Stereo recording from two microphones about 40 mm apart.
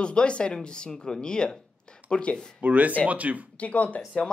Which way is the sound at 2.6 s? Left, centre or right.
Right.